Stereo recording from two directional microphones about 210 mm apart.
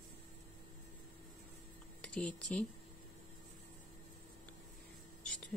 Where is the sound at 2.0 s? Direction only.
5° left (ahead or behind).